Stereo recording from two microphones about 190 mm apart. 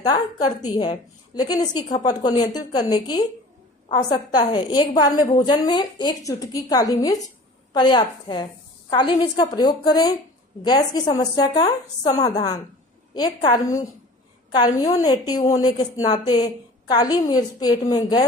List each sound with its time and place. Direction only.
0.0 s a woman's voice: 20° left (ahead or behind)